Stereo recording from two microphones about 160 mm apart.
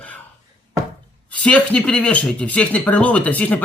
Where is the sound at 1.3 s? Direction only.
5° left (ahead or behind).